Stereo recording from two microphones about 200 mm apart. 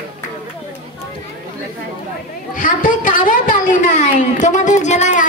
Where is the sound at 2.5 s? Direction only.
40° left (ahead or behind).